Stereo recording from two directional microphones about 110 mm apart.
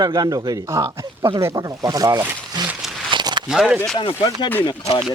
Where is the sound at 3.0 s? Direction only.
45° right (ahead or behind).